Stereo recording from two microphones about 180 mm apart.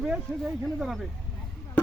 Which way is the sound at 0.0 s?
5° right (ahead or behind).